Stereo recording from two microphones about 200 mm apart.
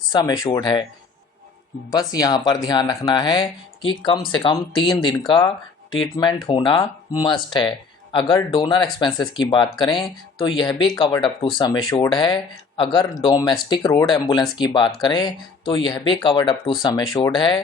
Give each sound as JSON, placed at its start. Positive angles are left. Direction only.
{"t": 0.1, "sound": "speech", "side_deg": 20}
{"t": 1.9, "sound": "speech", "side_deg": 20}